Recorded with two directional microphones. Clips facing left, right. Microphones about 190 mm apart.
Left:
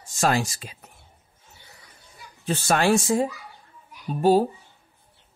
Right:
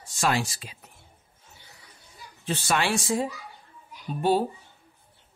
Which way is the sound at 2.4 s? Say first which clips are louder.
Left 5 dB; 45° left (ahead or behind).